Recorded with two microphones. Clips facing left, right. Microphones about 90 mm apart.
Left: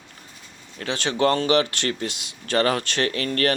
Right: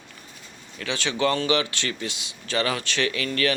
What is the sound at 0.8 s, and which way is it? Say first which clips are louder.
Speech: left 3 dB; 40° left (ahead or behind).